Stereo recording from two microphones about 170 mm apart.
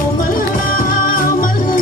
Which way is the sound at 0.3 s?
55° left (ahead or behind).